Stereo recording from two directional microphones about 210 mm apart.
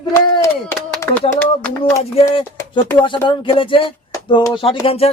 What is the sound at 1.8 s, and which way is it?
Speech, 25° left (ahead or behind).